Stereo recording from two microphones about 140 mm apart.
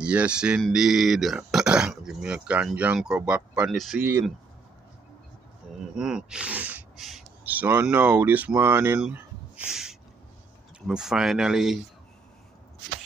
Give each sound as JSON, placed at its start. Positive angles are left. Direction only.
{"t": 0.0, "sound": "speech", "side_deg": -10}
{"t": 4.0, "sound": "speech", "side_deg": -15}
{"t": 5.9, "sound": "speech", "side_deg": -5}
{"t": 7.4, "sound": "speech", "side_deg": -15}
{"t": 9.0, "sound": "a sound", "side_deg": -5}
{"t": 10.9, "sound": "speech", "side_deg": -5}